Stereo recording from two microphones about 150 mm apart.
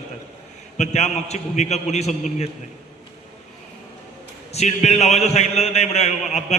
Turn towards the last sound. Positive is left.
turn(degrees=45)  # may be behind; listen again after turning